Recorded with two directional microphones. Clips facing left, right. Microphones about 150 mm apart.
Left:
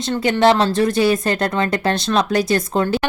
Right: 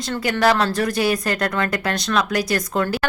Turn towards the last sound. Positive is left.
turn(degrees=25)  # may be behind; listen again after turning